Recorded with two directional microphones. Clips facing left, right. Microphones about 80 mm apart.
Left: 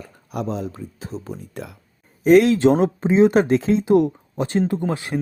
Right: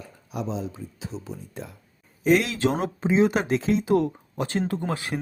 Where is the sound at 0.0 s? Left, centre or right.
Left.